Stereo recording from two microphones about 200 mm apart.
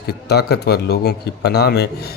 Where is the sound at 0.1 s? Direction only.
55° left (ahead or behind).